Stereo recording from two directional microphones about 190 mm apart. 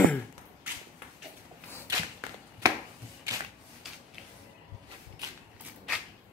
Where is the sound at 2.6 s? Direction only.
20° right (ahead or behind).